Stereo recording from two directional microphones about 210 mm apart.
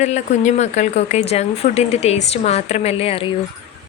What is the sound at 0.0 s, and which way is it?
A woman's voice, 35° left (ahead or behind).